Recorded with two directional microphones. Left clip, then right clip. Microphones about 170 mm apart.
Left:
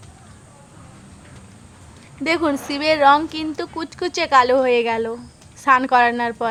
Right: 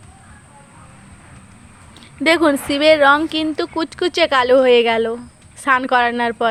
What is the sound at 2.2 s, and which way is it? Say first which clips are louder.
A woman's voice: right 6 dB; 25° right (ahead or behind).